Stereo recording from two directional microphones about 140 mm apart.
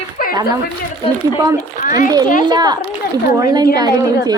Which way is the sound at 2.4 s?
30° right (ahead or behind).